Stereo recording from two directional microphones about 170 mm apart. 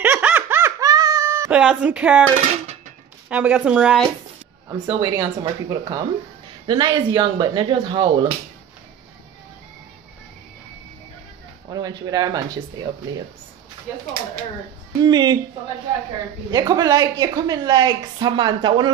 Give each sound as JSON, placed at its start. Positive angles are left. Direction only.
{"t": 0.0, "sound": "laughter", "side_deg": -10}
{"t": 1.6, "sound": "speech", "side_deg": -5}
{"t": 3.3, "sound": "speech", "side_deg": -5}
{"t": 4.6, "sound": "a woman's voice", "side_deg": -20}
{"t": 11.7, "sound": "a woman's voice", "side_deg": -25}
{"t": 15.0, "sound": "a woman's voice", "side_deg": -25}
{"t": 16.4, "sound": "a woman's voice", "side_deg": -20}